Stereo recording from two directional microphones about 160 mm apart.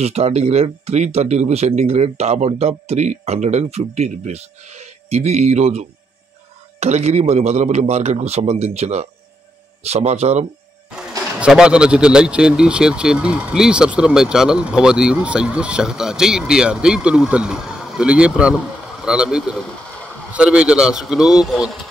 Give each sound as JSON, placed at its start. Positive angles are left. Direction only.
{"t": 0.0, "sound": "speech", "side_deg": -40}
{"t": 10.9, "sound": "speech", "side_deg": -5}